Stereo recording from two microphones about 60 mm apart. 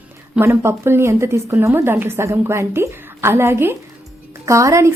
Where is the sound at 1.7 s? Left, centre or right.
Right.